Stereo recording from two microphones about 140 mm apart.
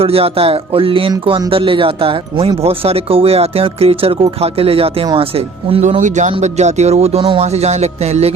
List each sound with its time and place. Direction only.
0.0 s speech: 45° right (ahead or behind)
6.0 s speech: 60° right (ahead or behind)